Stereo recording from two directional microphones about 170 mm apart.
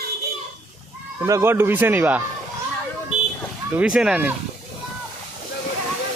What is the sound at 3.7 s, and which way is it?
Speech, 5° right (ahead or behind).